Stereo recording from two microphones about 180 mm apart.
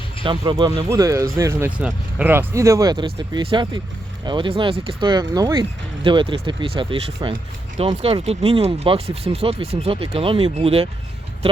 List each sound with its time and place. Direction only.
0.3 s speech: 25° right (ahead or behind)